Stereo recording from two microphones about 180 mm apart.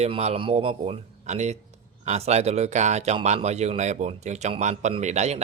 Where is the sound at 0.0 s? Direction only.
35° right (ahead or behind).